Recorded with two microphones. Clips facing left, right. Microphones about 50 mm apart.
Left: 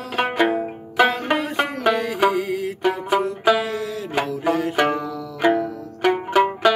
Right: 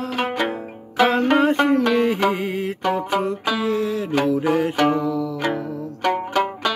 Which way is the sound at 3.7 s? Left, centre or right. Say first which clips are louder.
Right 5 dB; right.